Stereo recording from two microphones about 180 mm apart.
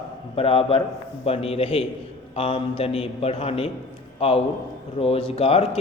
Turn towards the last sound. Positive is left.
turn(degrees=35)  # may be behind; listen again after turning